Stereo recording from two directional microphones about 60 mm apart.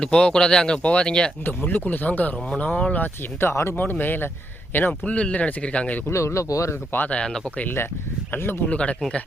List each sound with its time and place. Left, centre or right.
0.0 s speech: centre
1.5 s speech: left
3.4 s speech: left
3.8 s speech: left
6.1 s speech: left
7.1 s speech: centre
8.3 s speech: left
8.7 s speech: centre